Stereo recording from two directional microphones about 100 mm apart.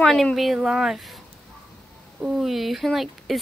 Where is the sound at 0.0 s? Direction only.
5° left (ahead or behind).